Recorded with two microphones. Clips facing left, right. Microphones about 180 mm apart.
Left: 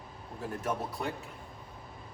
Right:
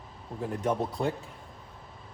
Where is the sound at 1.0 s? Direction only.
30° right (ahead or behind).